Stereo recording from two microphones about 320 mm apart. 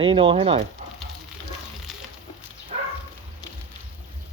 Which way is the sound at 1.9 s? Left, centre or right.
Centre.